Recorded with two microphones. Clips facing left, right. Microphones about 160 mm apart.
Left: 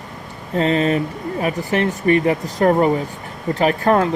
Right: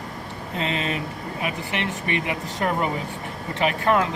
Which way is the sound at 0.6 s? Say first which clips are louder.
Left 10 dB; 40° left (ahead or behind).